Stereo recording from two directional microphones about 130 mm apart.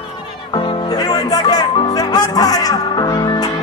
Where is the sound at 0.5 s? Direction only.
40° left (ahead or behind).